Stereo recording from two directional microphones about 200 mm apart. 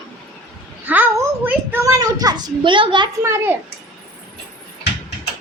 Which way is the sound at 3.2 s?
10° right (ahead or behind).